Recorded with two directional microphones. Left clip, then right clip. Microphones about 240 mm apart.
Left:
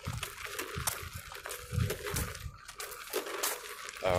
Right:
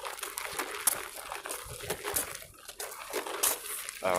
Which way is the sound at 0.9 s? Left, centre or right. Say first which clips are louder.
Right 3 dB; right.